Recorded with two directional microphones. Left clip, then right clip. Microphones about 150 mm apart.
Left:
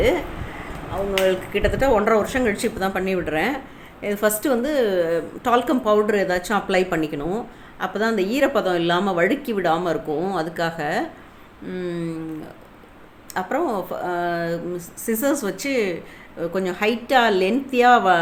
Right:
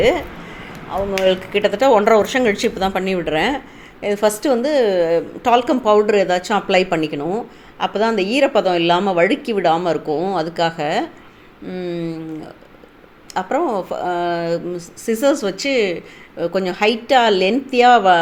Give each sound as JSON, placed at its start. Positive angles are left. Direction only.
{"t": 1.3, "sound": "a woman's voice", "side_deg": -25}